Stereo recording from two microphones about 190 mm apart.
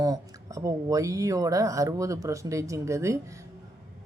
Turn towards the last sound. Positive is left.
turn(degrees=-15)  # may be behind; listen again after turning